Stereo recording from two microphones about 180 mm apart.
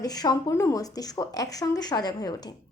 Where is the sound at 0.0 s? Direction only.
20° left (ahead or behind).